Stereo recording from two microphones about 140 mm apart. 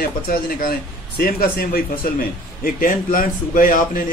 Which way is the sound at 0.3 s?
90° left.